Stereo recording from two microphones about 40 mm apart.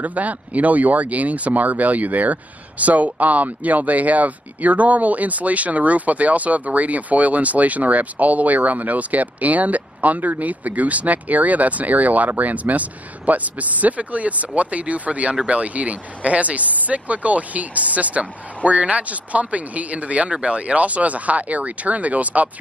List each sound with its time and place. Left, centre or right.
0.0 s speech: right